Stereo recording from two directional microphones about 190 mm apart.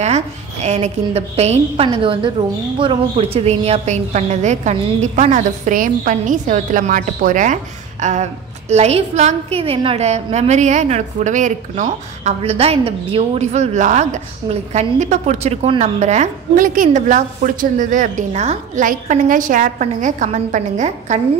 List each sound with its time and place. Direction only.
0.0 s a woman's voice: 35° right (ahead or behind)